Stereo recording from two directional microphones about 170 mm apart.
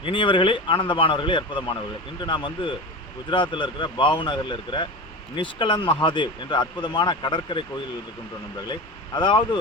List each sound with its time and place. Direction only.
0.0 s speech: 30° left (ahead or behind)
8.6 s speech: 25° left (ahead or behind)